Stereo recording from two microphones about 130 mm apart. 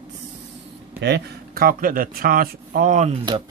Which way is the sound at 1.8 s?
90° right.